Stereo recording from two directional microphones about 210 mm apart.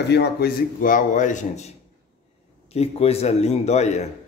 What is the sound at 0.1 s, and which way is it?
A man's voice, 50° left (ahead or behind).